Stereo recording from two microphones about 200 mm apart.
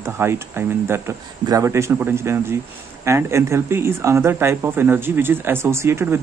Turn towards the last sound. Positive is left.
turn(degrees=-10)  # may be behind; listen again after turning